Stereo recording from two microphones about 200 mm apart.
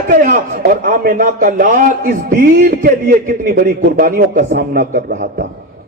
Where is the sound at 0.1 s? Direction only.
45° right (ahead or behind).